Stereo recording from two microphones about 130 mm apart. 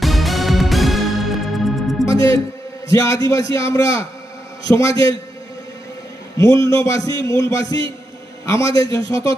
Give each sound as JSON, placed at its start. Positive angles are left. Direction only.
{"t": 0.0, "sound": "music", "side_deg": 0}
{"t": 2.0, "sound": "a man's voice", "side_deg": 25}
{"t": 6.3, "sound": "a man's voice", "side_deg": 25}